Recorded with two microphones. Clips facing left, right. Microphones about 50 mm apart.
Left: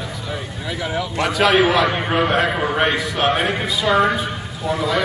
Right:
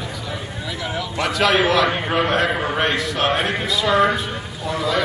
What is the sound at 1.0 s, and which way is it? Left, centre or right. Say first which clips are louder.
A man's voice: left 2 dB; centre.